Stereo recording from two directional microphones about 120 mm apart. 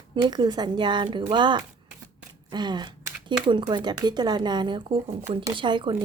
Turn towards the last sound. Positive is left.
turn(degrees=-45)  # may be behind; listen again after turning